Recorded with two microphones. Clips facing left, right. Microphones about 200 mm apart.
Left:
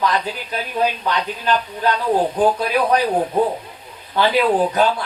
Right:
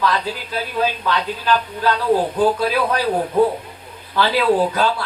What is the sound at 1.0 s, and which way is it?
Speech, 20° left (ahead or behind).